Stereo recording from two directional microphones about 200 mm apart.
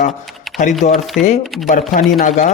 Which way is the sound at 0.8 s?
35° left (ahead or behind).